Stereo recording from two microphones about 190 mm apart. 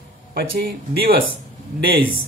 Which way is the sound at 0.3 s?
50° right (ahead or behind).